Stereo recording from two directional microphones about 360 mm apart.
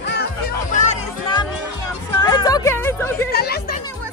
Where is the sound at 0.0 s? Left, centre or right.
Left; by 3.3 s centre.